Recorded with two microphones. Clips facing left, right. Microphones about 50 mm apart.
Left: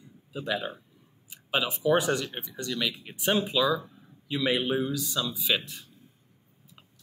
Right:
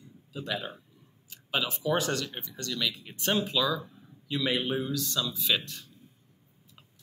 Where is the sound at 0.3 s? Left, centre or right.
Centre.